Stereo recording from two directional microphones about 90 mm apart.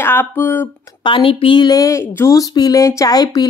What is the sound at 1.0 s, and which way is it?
Speech, 75° left (ahead or behind).